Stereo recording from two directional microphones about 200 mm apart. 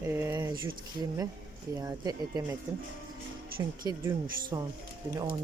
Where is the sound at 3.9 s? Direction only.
20° right (ahead or behind).